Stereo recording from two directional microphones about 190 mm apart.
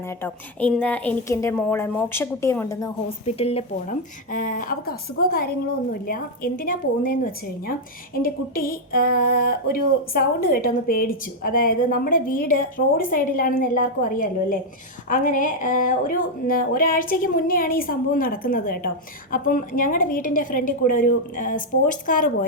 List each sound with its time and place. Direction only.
0.2 s a woman's voice: 10° left (ahead or behind)
3.2 s speech: 30° left (ahead or behind)